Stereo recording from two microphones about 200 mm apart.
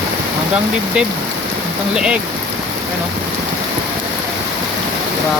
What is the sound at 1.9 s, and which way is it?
Speech, 5° right (ahead or behind).